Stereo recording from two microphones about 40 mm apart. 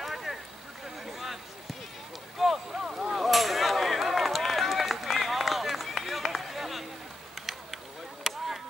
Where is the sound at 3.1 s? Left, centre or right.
Centre.